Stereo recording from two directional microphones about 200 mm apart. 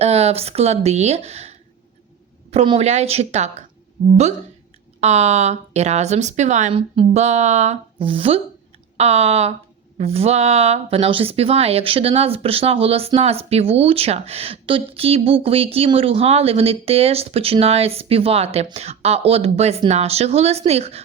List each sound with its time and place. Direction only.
0.0 s speech: 30° right (ahead or behind)
4.0 s a woman's voice: 45° right (ahead or behind)
4.9 s speech: 35° right (ahead or behind)